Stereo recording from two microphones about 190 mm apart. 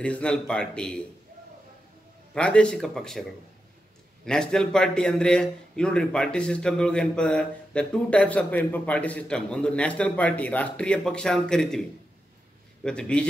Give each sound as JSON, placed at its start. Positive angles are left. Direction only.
{"t": 0.0, "sound": "a man's voice", "side_deg": 5}
{"t": 2.3, "sound": "a man's voice", "side_deg": 5}
{"t": 4.3, "sound": "a man's voice", "side_deg": 5}
{"t": 12.8, "sound": "a man's voice", "side_deg": 5}